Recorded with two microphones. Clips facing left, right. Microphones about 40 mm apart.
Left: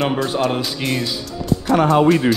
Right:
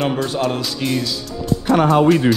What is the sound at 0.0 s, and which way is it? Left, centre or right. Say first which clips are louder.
Speech: left 1 dB; centre.